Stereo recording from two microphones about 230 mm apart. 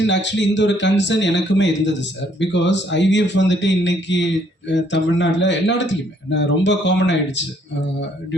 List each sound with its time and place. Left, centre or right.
0.0 s speech: left